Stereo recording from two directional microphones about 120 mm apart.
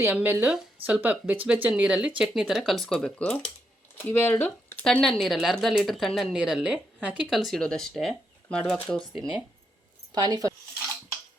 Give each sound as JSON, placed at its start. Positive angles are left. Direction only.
{"t": 0.1, "sound": "speech", "side_deg": -15}
{"t": 7.3, "sound": "speech", "side_deg": 0}
{"t": 10.1, "sound": "speech", "side_deg": -35}